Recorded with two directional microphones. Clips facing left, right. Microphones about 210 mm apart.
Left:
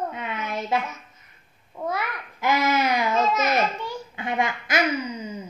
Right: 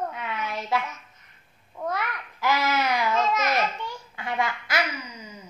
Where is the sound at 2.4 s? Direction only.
20° left (ahead or behind).